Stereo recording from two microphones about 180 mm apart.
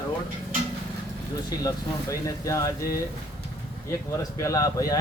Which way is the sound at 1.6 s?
20° left (ahead or behind).